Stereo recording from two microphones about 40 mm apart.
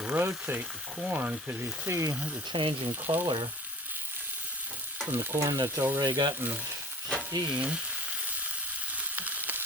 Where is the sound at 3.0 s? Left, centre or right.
Right.